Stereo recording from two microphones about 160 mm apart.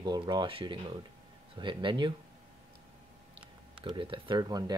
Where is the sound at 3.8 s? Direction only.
30° right (ahead or behind).